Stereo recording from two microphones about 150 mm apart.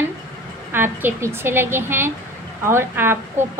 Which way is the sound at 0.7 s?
15° right (ahead or behind).